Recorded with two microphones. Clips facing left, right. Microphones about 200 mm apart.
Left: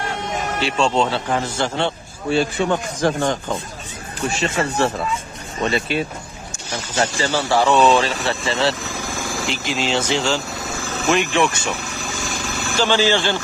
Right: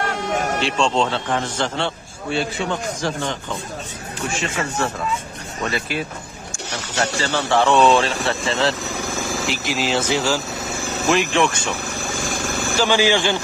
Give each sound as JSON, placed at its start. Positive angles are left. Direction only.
{"t": 0.6, "sound": "a man's voice", "side_deg": 5}
{"t": 2.6, "sound": "speech", "side_deg": 50}
{"t": 6.7, "sound": "speech", "side_deg": -70}
{"t": 7.2, "sound": "speech", "side_deg": 10}
{"t": 12.1, "sound": "vehicle", "side_deg": -55}
{"t": 12.7, "sound": "speech", "side_deg": -10}